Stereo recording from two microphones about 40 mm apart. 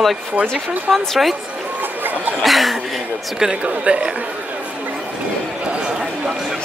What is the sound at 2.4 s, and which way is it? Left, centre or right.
Speech, centre.